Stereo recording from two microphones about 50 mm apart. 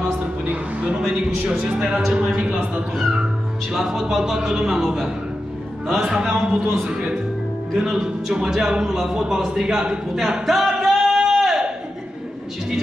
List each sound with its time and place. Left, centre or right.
0.8 s speech: centre
9.5 s singing: centre